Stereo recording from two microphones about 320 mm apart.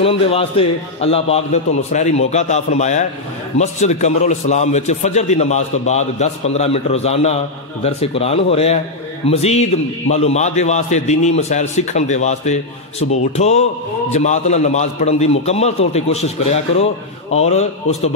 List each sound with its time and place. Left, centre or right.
0.0 s a man's voice: centre
17.3 s a man's voice: left